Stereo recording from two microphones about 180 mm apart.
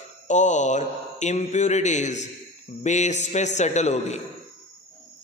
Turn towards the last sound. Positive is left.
turn(degrees=40)  # may be behind; listen again after turning